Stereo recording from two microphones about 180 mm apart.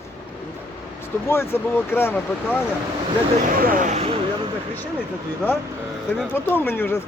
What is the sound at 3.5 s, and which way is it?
Speech, 50° right (ahead or behind).